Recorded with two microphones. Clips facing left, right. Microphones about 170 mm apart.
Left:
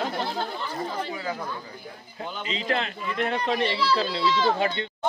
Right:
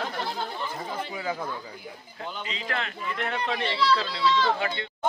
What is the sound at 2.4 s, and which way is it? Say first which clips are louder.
A man's voice: left 7 dB; 25° left (ahead or behind).